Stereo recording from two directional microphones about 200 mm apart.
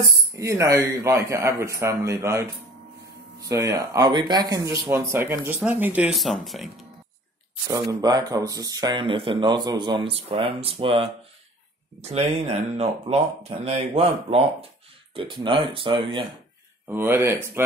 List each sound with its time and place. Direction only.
0.4 s speech: 15° right (ahead or behind)
7.7 s speech: 20° right (ahead or behind)
16.8 s speech: 10° right (ahead or behind)